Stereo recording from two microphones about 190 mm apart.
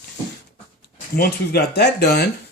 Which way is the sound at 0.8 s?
55° left (ahead or behind).